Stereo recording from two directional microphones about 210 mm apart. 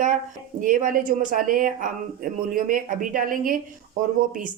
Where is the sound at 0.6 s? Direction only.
40° right (ahead or behind).